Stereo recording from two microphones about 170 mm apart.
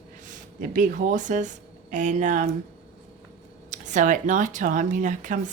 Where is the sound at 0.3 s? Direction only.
50° right (ahead or behind).